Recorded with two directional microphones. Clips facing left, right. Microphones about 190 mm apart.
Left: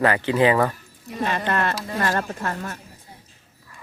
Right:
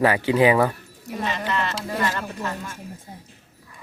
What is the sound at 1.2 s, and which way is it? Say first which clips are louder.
Speech: left 3 dB; 55° left (ahead or behind).